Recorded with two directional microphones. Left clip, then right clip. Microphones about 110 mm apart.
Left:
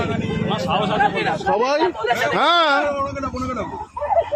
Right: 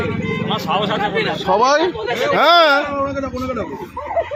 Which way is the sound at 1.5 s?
Centre (ahead or behind).